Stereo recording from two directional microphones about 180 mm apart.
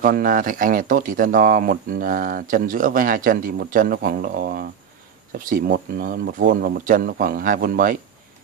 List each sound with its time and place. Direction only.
0.0 s speech: 55° right (ahead or behind)